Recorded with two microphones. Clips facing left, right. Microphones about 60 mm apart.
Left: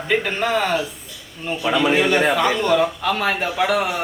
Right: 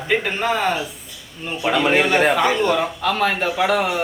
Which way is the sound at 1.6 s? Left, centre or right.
Right.